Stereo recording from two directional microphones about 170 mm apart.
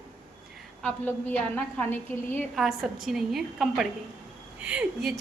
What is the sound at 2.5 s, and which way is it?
A woman's voice, centre (ahead or behind).